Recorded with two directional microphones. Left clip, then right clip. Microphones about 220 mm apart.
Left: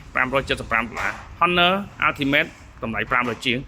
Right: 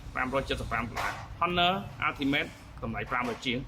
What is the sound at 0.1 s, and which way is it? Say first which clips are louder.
Speech: left 9 dB; 30° left (ahead or behind).